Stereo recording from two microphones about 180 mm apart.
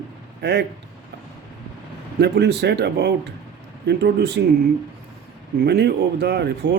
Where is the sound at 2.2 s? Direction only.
70° right (ahead or behind).